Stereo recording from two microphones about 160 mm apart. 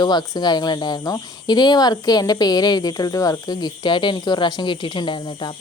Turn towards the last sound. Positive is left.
turn(degrees=30)  # may be behind; listen again after turning